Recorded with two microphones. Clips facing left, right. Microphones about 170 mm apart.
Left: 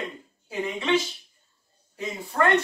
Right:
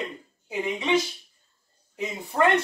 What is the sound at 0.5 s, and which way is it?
A man's voice, 15° right (ahead or behind).